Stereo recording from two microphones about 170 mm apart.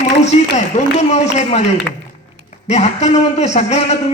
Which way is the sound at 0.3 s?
45° left (ahead or behind).